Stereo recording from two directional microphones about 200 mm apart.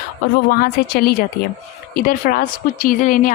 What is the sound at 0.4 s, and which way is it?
Speech, 45° left (ahead or behind).